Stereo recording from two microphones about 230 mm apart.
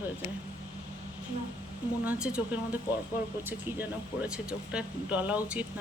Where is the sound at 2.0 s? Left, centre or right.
Centre.